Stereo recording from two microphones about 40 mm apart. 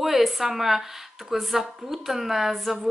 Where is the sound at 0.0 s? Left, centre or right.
Centre.